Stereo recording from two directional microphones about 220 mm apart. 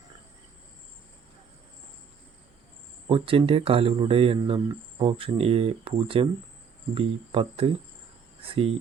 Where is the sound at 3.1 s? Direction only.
25° right (ahead or behind).